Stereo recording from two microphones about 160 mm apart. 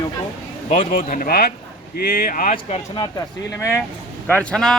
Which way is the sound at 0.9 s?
60° left (ahead or behind).